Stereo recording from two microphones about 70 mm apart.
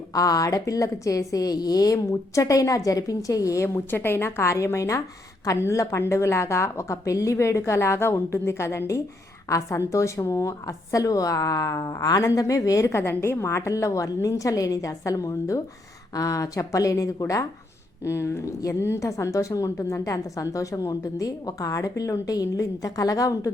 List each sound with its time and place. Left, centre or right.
0.1 s a woman's voice: left
3.8 s a woman's voice: left
13.0 s a woman's voice: left
18.0 s a woman's voice: left